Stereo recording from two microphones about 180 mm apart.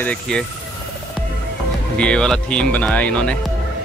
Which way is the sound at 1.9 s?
5° left (ahead or behind).